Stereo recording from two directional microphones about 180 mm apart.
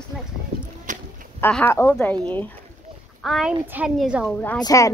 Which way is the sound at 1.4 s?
10° left (ahead or behind).